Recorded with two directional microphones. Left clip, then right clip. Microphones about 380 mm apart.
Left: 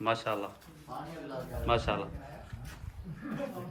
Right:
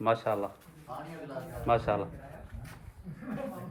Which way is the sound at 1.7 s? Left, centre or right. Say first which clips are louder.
Right 3 dB; centre.